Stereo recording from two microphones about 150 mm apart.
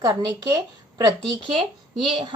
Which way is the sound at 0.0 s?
25° right (ahead or behind).